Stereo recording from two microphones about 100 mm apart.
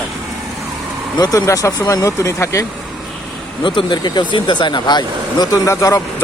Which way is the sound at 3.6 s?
50° left (ahead or behind).